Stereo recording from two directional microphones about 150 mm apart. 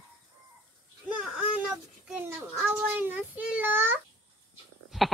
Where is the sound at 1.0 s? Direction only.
5° right (ahead or behind).